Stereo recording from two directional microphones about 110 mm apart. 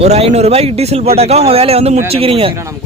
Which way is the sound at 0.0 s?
80° right.